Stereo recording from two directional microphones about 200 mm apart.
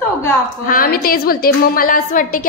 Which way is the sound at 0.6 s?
45° left (ahead or behind).